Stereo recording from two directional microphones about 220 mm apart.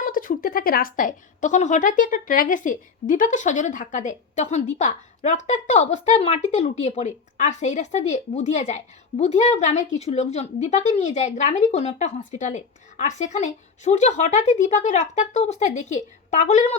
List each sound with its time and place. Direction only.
0.0 s a woman's voice: 40° left (ahead or behind)